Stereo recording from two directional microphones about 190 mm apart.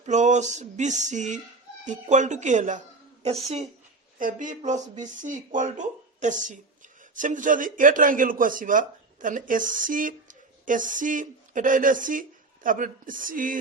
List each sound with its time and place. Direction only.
0.0 s a man's voice: 40° right (ahead or behind)